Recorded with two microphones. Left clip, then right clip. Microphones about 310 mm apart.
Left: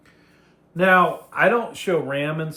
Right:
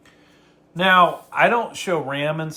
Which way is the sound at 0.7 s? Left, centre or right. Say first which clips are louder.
Right 1 dB; centre.